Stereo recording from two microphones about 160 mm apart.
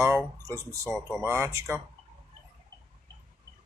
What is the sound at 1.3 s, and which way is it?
Speech, 15° right (ahead or behind).